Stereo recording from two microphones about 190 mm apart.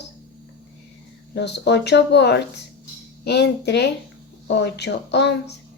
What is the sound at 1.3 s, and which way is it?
A woman's voice, 65° left (ahead or behind).